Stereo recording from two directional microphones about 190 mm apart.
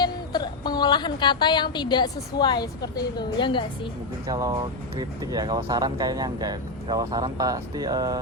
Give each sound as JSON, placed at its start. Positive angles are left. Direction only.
{"t": 0.0, "sound": "a woman's voice", "side_deg": 20}
{"t": 4.3, "sound": "speech", "side_deg": -20}